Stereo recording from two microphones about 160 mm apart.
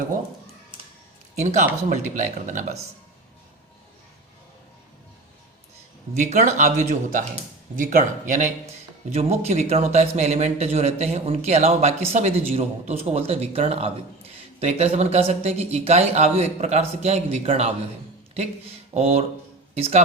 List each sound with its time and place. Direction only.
1.4 s a man's voice: 45° right (ahead or behind)
6.1 s a man's voice: 50° right (ahead or behind)
18.9 s a man's voice: 40° right (ahead or behind)